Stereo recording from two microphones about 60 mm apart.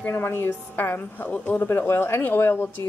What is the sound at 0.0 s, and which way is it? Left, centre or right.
A woman's voice, left.